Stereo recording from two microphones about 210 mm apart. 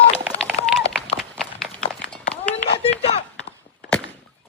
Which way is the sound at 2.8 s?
25° left (ahead or behind).